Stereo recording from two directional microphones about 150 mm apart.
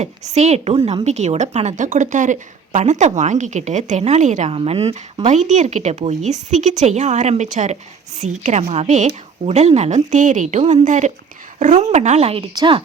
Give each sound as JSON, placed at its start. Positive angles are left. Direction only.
{"t": 0.0, "sound": "a woman's voice", "side_deg": -50}